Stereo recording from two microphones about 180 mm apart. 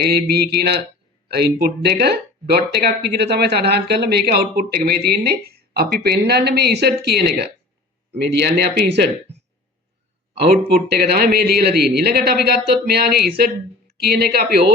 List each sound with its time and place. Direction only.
0.0 s speech: 65° right (ahead or behind)
10.8 s speech: 60° right (ahead or behind)